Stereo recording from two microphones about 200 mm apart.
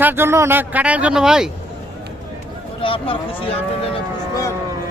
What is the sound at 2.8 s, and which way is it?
Speech, 25° left (ahead or behind).